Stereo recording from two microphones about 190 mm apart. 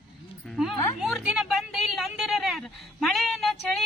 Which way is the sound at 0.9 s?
Centre (ahead or behind).